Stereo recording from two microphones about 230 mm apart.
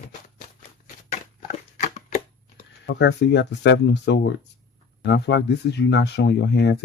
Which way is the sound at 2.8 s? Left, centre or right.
Left.